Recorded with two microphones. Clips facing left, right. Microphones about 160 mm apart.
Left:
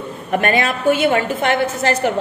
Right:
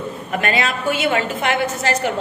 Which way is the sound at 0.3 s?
50° left (ahead or behind).